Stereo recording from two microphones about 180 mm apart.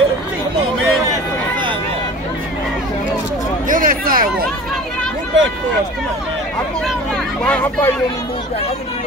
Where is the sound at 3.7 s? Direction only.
50° right (ahead or behind).